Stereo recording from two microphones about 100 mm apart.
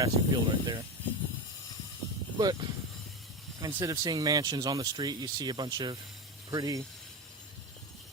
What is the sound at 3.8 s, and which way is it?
Speech, 40° right (ahead or behind).